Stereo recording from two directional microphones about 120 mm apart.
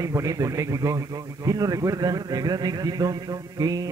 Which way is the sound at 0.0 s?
30° right (ahead or behind).